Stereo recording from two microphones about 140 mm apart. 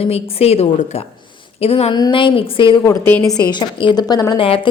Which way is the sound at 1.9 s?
30° left (ahead or behind).